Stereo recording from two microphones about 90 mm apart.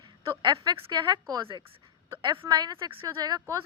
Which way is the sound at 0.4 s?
55° right (ahead or behind).